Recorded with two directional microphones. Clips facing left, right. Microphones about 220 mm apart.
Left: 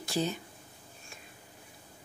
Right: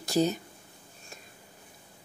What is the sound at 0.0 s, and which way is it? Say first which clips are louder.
Speech: right 6 dB; 40° right (ahead or behind).